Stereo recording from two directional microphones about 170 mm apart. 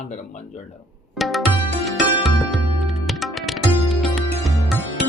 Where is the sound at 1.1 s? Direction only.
Centre (ahead or behind).